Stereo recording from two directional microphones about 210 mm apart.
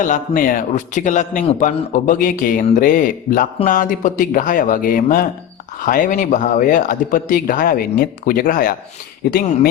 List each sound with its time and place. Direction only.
0.0 s a man's voice: 40° left (ahead or behind)